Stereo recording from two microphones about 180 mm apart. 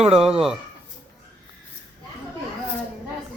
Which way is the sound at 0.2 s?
5° right (ahead or behind).